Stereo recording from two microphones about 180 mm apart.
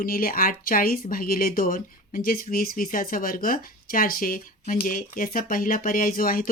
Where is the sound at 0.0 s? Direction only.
55° left (ahead or behind).